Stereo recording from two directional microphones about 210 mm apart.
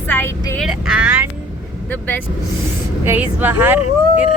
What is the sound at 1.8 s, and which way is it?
Speech, 10° left (ahead or behind).